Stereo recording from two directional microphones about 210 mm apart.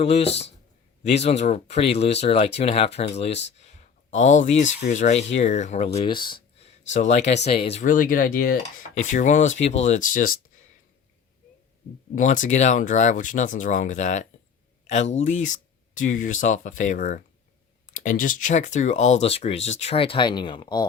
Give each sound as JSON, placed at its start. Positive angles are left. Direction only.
{"t": 0.0, "sound": "speech", "side_deg": 30}
{"t": 6.9, "sound": "speech", "side_deg": 35}
{"t": 12.1, "sound": "speech", "side_deg": 40}